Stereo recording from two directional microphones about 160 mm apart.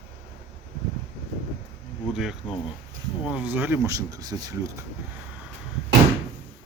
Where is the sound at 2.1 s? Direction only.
5° right (ahead or behind); by 4.7 s 20° right (ahead or behind).